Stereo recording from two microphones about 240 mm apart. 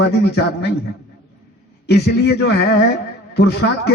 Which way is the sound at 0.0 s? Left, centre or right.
Left.